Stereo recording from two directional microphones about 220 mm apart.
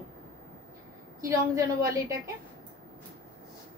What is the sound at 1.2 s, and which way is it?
A woman's voice, 15° right (ahead or behind).